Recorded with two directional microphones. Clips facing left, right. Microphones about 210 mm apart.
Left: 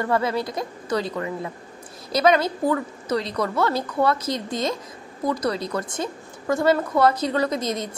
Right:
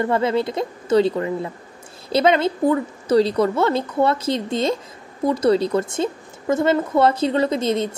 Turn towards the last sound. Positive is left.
turn(degrees=-25)  # may be behind; listen again after turning